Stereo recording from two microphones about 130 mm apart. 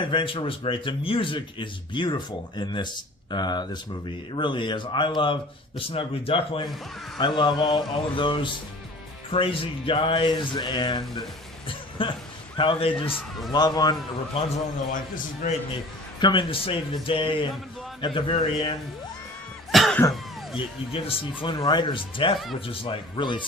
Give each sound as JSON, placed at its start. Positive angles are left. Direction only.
{"t": 0.1, "sound": "speech", "side_deg": 40}
{"t": 11.7, "sound": "a sound", "side_deg": 40}
{"t": 12.5, "sound": "speech", "side_deg": 45}
{"t": 13.5, "sound": "speech", "side_deg": 30}
{"t": 14.3, "sound": "speech", "side_deg": 50}
{"t": 15.4, "sound": "a man's voice", "side_deg": 85}
{"t": 16.2, "sound": "speech", "side_deg": 40}
{"t": 19.7, "sound": "cough", "side_deg": 0}
{"t": 21.4, "sound": "speech", "side_deg": 35}